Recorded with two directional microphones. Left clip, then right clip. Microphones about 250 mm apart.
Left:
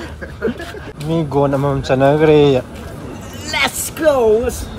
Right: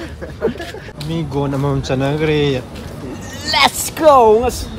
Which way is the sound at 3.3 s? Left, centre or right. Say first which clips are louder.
Right 4 dB; right.